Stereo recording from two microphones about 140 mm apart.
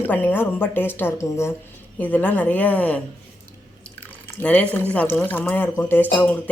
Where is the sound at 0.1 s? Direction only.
15° left (ahead or behind).